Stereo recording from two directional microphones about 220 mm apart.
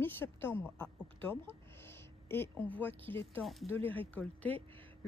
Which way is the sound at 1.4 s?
10° left (ahead or behind).